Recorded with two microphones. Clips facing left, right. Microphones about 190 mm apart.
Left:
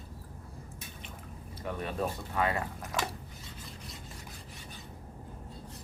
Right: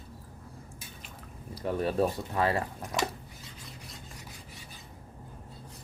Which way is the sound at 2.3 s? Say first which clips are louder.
Right 2 dB; 30° right (ahead or behind).